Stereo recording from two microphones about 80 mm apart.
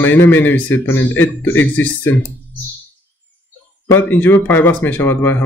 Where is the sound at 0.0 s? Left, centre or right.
Left.